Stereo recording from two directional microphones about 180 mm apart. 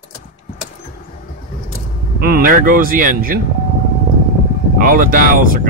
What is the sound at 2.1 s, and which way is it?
Speech, 55° right (ahead or behind).